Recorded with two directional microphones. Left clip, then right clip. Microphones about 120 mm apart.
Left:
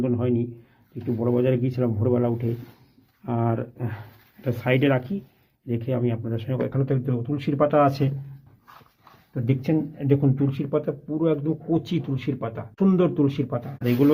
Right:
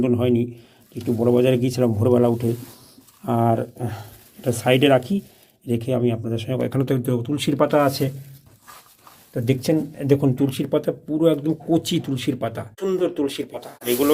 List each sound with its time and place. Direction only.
0.0 s a man's voice: 35° right (ahead or behind); by 6.7 s 20° right (ahead or behind)
6.7 s a man's voice: 45° right (ahead or behind)
7.8 s speech: 15° right (ahead or behind)
9.3 s speech: 25° right (ahead or behind)